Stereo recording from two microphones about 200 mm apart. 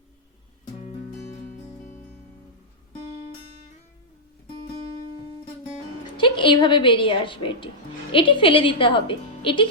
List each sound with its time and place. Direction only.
6.1 s a woman's voice: 25° left (ahead or behind)